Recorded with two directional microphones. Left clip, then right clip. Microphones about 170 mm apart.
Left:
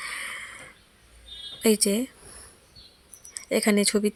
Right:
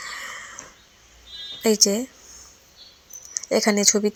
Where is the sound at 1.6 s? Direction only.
15° left (ahead or behind).